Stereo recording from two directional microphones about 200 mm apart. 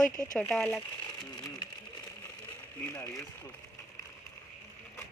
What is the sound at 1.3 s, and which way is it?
Sewing machine, 20° left (ahead or behind).